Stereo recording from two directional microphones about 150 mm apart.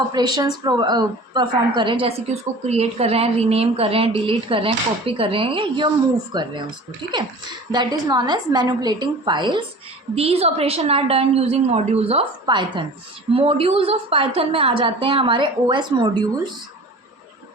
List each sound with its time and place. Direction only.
0.1 s a woman's voice: 30° right (ahead or behind)
7.7 s a woman's voice: 25° right (ahead or behind)